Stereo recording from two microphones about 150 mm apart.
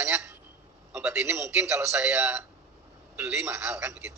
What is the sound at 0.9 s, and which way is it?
A man's voice, 15° right (ahead or behind).